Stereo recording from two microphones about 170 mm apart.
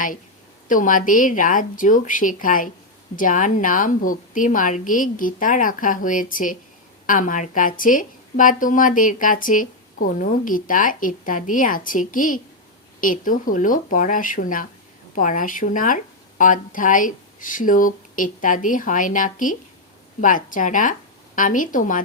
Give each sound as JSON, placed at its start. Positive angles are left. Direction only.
{"t": 0.7, "sound": "a woman's voice", "side_deg": 50}